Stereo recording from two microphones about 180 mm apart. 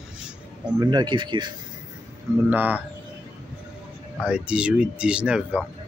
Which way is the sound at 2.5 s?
10° right (ahead or behind).